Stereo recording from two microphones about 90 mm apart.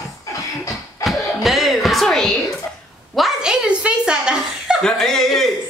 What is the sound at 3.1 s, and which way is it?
A woman's voice, 5° right (ahead or behind).